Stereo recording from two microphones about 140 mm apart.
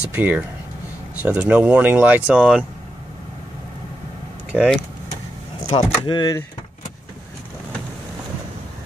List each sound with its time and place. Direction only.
0.1 s speech: 10° right (ahead or behind)
4.5 s speech: 5° right (ahead or behind)
5.8 s speech: 30° left (ahead or behind)